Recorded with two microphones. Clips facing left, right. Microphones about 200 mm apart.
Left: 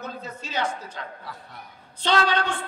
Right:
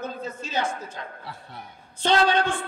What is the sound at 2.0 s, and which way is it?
Speech, 50° right (ahead or behind).